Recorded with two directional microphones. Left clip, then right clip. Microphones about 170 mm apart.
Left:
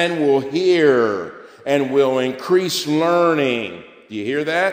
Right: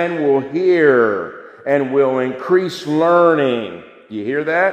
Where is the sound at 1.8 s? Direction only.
25° left (ahead or behind); by 3.4 s 5° left (ahead or behind).